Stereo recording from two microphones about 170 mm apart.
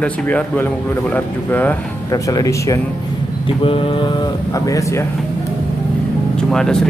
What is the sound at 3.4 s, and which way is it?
Speech, 30° left (ahead or behind).